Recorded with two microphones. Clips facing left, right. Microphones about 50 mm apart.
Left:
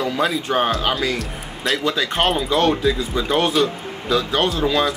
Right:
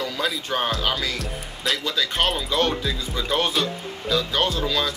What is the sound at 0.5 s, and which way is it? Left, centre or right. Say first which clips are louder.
Speech: left 5 dB; centre.